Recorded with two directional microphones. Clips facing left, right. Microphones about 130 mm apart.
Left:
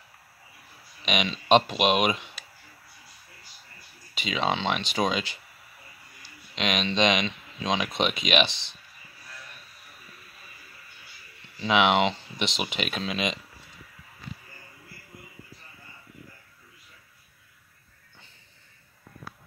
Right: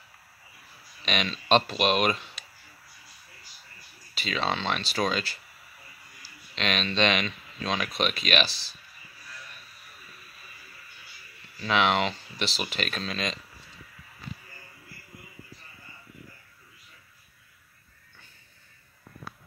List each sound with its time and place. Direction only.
1.0 s speech: 15° left (ahead or behind)
4.1 s speech: 15° left (ahead or behind)
6.5 s speech: 15° left (ahead or behind)
11.5 s speech: 15° left (ahead or behind)